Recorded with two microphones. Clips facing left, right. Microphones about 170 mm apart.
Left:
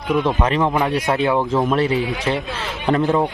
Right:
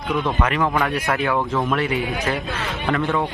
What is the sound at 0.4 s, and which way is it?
A man's voice, 25° left (ahead or behind).